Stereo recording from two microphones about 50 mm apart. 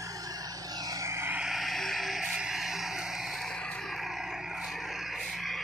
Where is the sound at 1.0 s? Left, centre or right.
Right.